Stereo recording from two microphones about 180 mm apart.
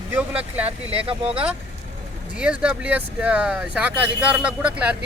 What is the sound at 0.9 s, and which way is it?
Speech, 30° right (ahead or behind).